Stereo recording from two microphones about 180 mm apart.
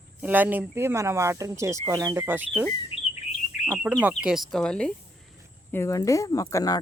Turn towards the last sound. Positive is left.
turn(degrees=20)  # may be behind; listen again after turning